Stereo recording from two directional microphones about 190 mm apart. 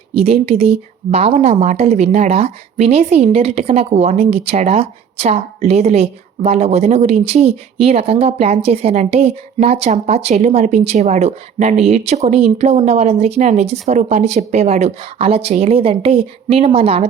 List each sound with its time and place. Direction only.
0.2 s speech: 30° right (ahead or behind)